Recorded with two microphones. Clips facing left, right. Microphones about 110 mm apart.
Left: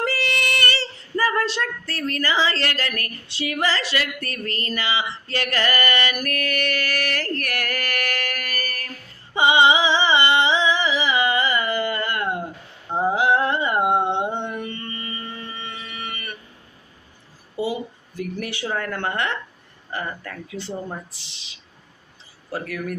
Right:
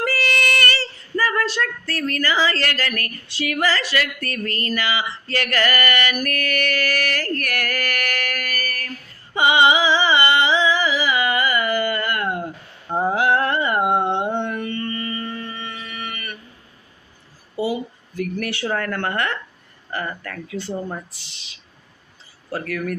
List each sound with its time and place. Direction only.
0.0 s speech: 25° left (ahead or behind)
9.3 s a sound: 25° left (ahead or behind)
13.1 s music: 15° left (ahead or behind)
18.5 s speech: 10° left (ahead or behind)
22.5 s speech: 15° left (ahead or behind)